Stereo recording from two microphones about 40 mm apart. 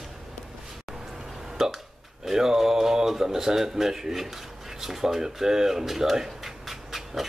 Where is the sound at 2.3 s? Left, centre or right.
Centre.